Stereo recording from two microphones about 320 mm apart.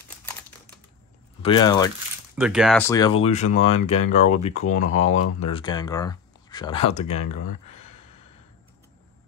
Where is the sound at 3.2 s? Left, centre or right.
Left.